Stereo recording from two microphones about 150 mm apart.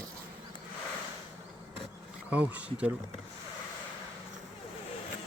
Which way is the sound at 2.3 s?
10° right (ahead or behind).